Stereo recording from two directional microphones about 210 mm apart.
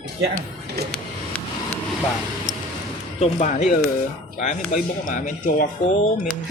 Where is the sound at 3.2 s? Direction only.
30° left (ahead or behind).